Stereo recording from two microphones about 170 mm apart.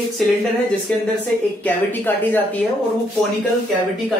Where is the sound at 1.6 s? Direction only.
10° left (ahead or behind).